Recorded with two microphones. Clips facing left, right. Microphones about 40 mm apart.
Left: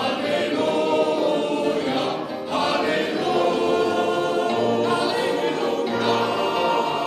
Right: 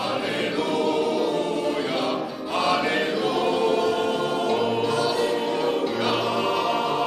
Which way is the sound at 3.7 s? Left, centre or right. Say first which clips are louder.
Left 1 dB; left.